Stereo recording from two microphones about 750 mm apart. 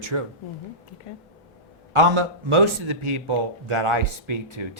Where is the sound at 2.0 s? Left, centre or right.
Right.